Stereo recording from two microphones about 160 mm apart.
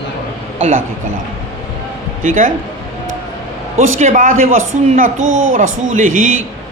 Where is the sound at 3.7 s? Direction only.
50° right (ahead or behind).